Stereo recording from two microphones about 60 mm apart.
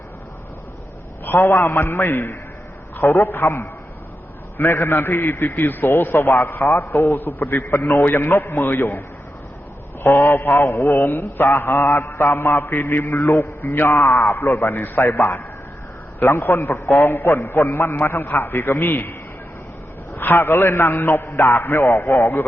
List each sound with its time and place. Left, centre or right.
1.2 s a man's voice: left
20.1 s a man's voice: left